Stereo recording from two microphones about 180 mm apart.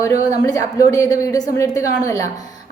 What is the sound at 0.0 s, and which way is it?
A woman's voice, 20° left (ahead or behind).